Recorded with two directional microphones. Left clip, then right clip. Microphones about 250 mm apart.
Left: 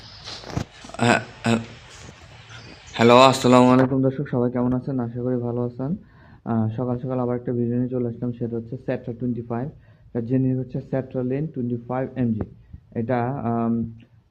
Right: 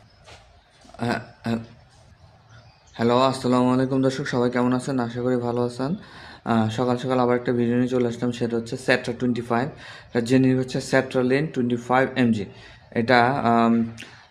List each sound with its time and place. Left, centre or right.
0.9 s speech: centre
2.9 s speech: centre